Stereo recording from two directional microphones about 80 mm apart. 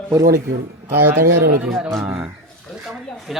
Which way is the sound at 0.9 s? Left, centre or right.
Right.